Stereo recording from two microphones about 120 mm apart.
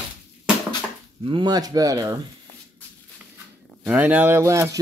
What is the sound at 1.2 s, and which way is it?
Speech, 45° right (ahead or behind).